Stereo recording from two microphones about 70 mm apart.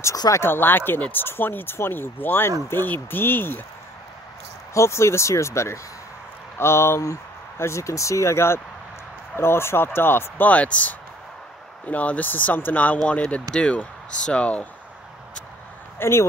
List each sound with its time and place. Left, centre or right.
0.3 s speech: left
4.7 s speech: left
10.5 s speech: centre
16.0 s speech: left